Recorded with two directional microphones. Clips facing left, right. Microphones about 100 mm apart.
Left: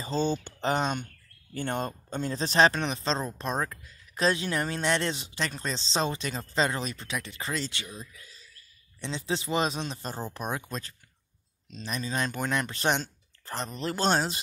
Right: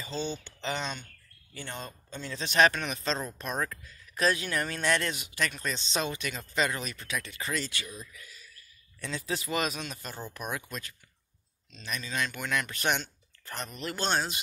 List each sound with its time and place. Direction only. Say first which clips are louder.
0.0 s speech: left 6 dB; 45° left (ahead or behind)